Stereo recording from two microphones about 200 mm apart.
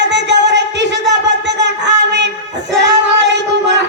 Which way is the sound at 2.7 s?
65° right (ahead or behind).